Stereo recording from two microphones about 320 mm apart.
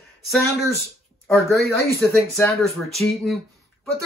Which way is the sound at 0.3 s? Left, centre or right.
Centre.